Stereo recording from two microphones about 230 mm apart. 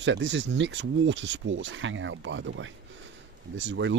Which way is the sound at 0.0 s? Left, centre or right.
Right.